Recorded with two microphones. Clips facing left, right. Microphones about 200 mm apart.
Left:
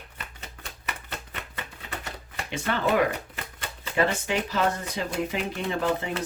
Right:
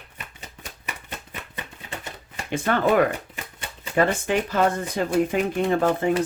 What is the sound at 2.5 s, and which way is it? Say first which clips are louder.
Speech: right 5 dB; 50° right (ahead or behind).